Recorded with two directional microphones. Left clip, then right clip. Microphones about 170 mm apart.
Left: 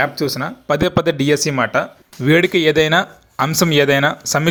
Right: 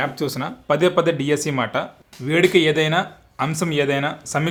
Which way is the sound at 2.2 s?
40° left (ahead or behind).